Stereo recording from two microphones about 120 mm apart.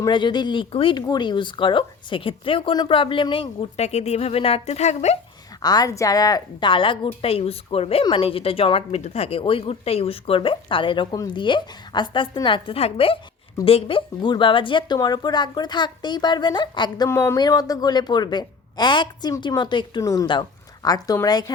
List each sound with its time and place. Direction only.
0.1 s speech: 40° left (ahead or behind)
1.0 s a woman's voice: 35° left (ahead or behind); by 5.1 s 70° left (ahead or behind)
5.6 s a woman's voice: 30° left (ahead or behind)
17.1 s speech: 20° left (ahead or behind)
17.3 s speech: 35° left (ahead or behind)